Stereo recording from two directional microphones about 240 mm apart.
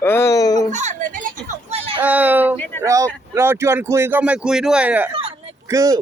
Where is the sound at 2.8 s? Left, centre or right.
Centre.